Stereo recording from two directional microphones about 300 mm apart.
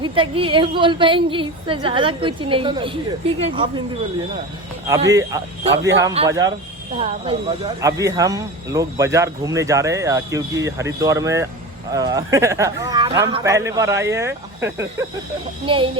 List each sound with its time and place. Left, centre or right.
0.0 s speech: centre
5.1 s speech: centre